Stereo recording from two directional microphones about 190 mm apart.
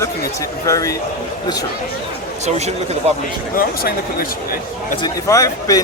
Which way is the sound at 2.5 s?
35° right (ahead or behind).